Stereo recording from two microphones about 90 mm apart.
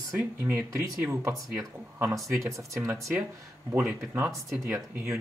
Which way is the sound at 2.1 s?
35° right (ahead or behind).